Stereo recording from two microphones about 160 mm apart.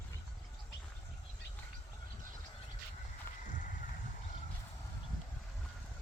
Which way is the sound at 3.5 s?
55° left (ahead or behind).